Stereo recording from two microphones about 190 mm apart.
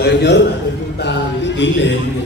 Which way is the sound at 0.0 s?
60° left (ahead or behind).